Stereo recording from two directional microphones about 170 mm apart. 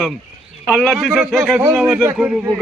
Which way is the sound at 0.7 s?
Centre (ahead or behind).